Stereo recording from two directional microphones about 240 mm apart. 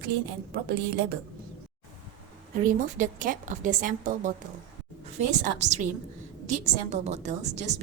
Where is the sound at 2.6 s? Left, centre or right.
Right.